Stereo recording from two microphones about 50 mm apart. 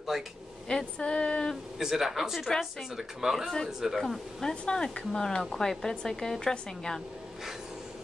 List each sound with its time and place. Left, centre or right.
0.1 s speech: centre
0.7 s a sound: centre
1.8 s speech: centre
4.0 s speech: centre